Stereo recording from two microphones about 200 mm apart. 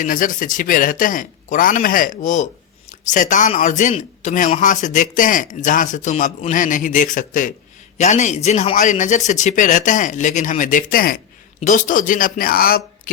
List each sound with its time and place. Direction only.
0.0 s a man's voice: 40° left (ahead or behind)